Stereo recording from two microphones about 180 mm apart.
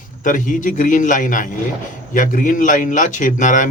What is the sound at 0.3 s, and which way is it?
Speech, 45° left (ahead or behind).